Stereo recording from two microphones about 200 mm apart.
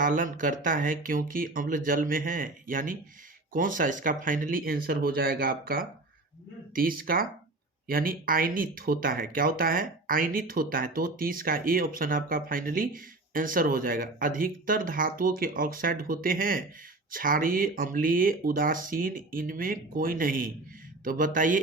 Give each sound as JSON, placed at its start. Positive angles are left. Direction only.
{"t": 0.0, "sound": "speech", "side_deg": -40}